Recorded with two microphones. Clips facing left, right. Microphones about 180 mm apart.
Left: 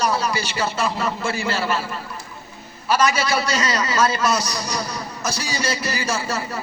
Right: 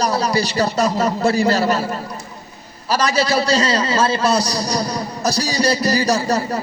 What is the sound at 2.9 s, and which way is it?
Speech, 35° right (ahead or behind).